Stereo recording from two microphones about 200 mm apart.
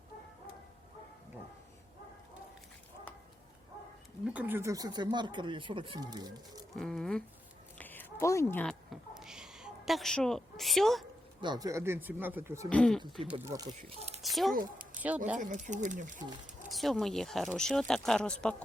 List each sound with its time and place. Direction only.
4.3 s speech: 10° right (ahead or behind)
6.7 s speech: 5° left (ahead or behind)
7.8 s a sound: 10° left (ahead or behind)
11.3 s speech: 20° right (ahead or behind)
12.6 s speech: 5° left (ahead or behind)
13.3 s speech: 20° right (ahead or behind)
14.2 s a sound: centre (ahead or behind)
14.5 s a sound: 45° right (ahead or behind)
15.4 s speech: 40° right (ahead or behind)
16.7 s speech: centre (ahead or behind)